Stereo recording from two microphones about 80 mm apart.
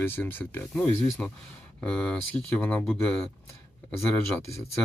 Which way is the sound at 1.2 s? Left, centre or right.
Centre.